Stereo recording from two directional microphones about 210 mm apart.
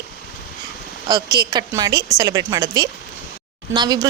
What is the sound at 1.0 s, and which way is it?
A woman's voice, 20° right (ahead or behind).